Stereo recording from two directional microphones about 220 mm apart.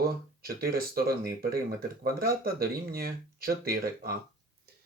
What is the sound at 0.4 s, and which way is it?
Speech, 45° right (ahead or behind).